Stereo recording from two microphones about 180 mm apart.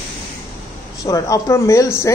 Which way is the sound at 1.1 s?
20° left (ahead or behind).